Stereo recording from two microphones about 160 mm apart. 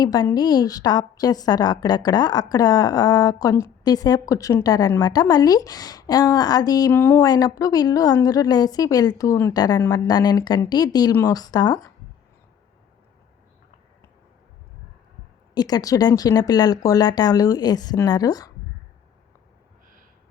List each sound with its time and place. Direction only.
0.0 s a woman's voice: 25° left (ahead or behind)
6.9 s speech: 15° left (ahead or behind)
7.3 s a woman's voice: 25° left (ahead or behind)
15.5 s a woman's voice: 25° left (ahead or behind)